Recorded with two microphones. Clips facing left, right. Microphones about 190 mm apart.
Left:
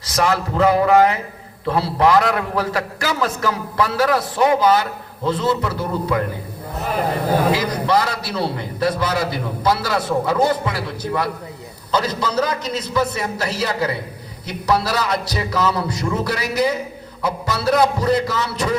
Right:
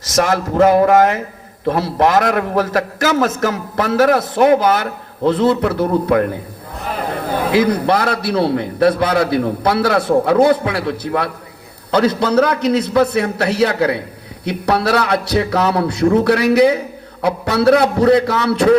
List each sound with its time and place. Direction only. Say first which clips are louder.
0.0 s a man's voice: right 3 dB; 45° right (ahead or behind)
7.5 s a man's voice: right 5 dB; 60° right (ahead or behind)